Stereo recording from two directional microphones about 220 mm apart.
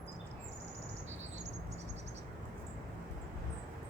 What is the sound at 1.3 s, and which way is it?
Bird, 30° right (ahead or behind).